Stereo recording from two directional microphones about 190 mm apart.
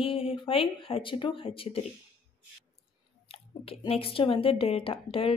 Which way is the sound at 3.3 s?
30° left (ahead or behind).